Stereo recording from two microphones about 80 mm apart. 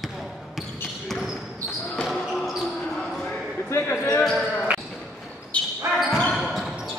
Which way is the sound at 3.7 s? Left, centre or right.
Left.